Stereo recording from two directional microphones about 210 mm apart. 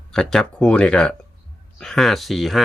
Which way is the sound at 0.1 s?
5° left (ahead or behind).